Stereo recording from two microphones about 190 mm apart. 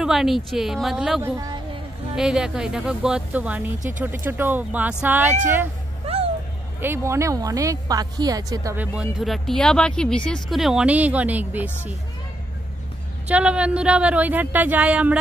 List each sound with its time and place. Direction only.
0.0 s speech: centre (ahead or behind)
1.2 s a woman's voice: 15° right (ahead or behind)
2.1 s speech: 5° right (ahead or behind)
6.1 s a sound: 30° right (ahead or behind)
6.8 s speech: 15° right (ahead or behind)
8.9 s speech: 5° right (ahead or behind)
13.3 s speech: 5° right (ahead or behind)